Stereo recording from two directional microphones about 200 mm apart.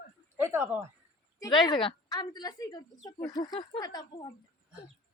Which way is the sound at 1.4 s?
20° left (ahead or behind).